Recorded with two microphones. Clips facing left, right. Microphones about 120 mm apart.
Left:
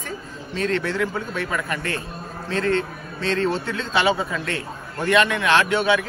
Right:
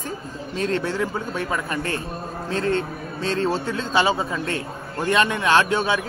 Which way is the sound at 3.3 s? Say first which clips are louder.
Even; 35° right (ahead or behind).